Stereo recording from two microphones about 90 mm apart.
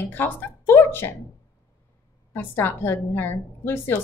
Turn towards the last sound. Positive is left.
turn(degrees=25)  # may be behind; listen again after turning